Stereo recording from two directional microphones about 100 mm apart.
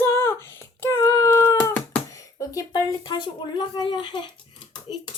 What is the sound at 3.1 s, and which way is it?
Speech, 50° left (ahead or behind).